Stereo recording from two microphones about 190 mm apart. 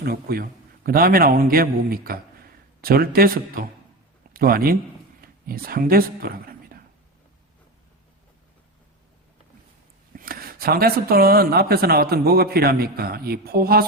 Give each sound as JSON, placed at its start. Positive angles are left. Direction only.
{"t": 0.0, "sound": "a man's voice", "side_deg": -55}
{"t": 10.2, "sound": "speech", "side_deg": -50}